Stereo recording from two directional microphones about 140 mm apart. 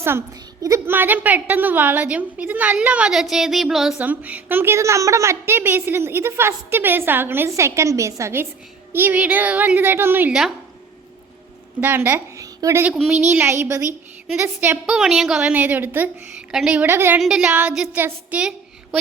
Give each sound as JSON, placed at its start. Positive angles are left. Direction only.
{"t": 0.6, "sound": "a woman's voice", "side_deg": -20}
{"t": 11.8, "sound": "a woman's voice", "side_deg": -15}
{"t": 14.8, "sound": "a woman's voice", "side_deg": -5}
{"t": 17.2, "sound": "a woman's voice", "side_deg": -5}